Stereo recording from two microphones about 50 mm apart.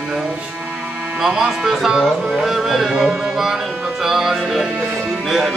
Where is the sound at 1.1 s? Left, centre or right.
Centre.